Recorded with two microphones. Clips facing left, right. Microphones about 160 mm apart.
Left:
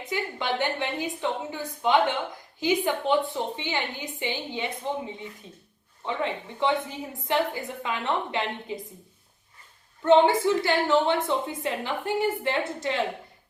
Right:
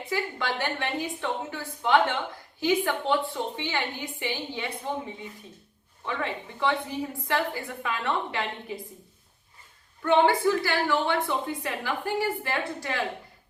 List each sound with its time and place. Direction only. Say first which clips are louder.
0.1 s a woman's voice: left 1 dB; 20° left (ahead or behind)
6.1 s a woman's voice: left 2 dB; 20° left (ahead or behind)
10.0 s a woman's voice: left 3 dB; 25° left (ahead or behind)